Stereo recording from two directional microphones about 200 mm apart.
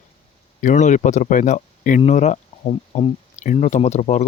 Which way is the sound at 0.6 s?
35° left (ahead or behind).